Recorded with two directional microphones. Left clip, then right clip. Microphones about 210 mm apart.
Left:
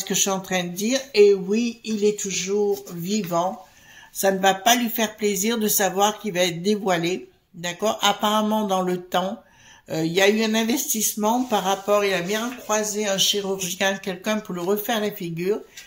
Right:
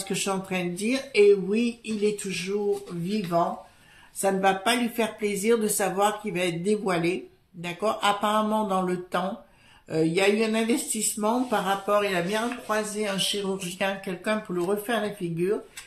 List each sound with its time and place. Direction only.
0.1 s speech: 35° left (ahead or behind)
4.2 s speech: 40° left (ahead or behind)